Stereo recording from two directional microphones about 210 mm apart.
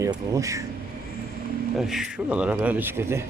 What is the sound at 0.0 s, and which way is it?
Speech, 15° right (ahead or behind).